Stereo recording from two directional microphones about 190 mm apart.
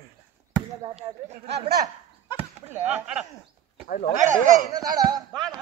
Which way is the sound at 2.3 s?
5° right (ahead or behind).